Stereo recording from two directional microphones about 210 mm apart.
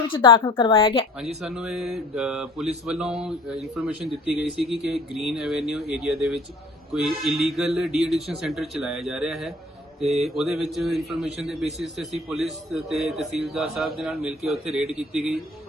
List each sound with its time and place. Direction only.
0.1 s a woman's voice: 25° left (ahead or behind)
1.4 s a man's voice: 5° right (ahead or behind)